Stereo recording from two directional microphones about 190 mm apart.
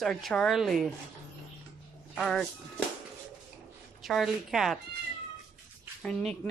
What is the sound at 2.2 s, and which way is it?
Speech, centre (ahead or behind).